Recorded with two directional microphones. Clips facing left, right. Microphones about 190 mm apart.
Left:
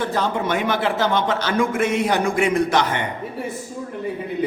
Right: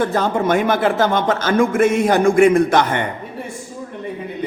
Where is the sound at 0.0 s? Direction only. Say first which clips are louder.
Right 4 dB; 50° right (ahead or behind).